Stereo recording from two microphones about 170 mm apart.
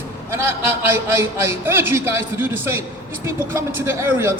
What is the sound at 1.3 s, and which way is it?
Speech, 15° right (ahead or behind).